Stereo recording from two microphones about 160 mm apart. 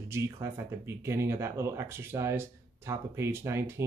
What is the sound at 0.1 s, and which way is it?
Speech, 15° right (ahead or behind).